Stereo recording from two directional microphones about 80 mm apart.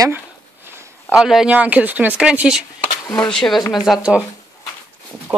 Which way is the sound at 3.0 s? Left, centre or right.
Left.